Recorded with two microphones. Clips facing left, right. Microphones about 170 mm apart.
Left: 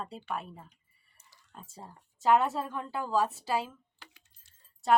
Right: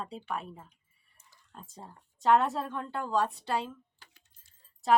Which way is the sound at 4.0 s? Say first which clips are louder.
Left 5 dB; 75° left (ahead or behind).